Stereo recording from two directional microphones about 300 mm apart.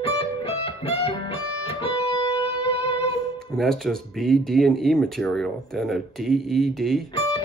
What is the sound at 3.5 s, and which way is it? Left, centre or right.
Speech, centre.